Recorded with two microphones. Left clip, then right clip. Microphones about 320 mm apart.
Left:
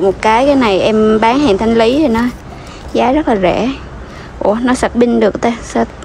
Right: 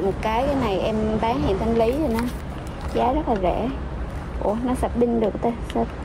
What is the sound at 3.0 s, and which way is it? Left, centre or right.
Speech, left.